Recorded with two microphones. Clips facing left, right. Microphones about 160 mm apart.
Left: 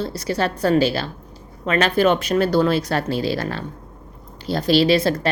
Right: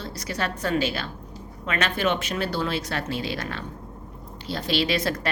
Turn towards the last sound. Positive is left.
turn(degrees=30)  # may be behind; listen again after turning